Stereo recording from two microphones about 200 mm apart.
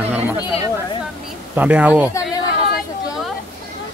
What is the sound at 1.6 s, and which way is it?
Speech, 5° right (ahead or behind).